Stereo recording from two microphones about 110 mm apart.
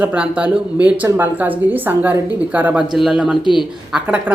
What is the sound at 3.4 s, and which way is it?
Speech, 45° left (ahead or behind).